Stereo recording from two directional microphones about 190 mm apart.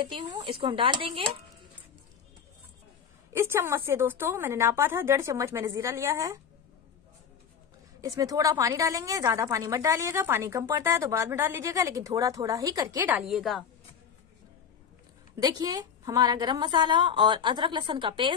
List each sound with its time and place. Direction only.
0.0 s a woman's voice: 25° right (ahead or behind)
3.3 s a woman's voice: 15° right (ahead or behind)
8.0 s a woman's voice: 20° right (ahead or behind)
13.3 s a woman's voice: centre (ahead or behind)
15.3 s a woman's voice: 20° right (ahead or behind)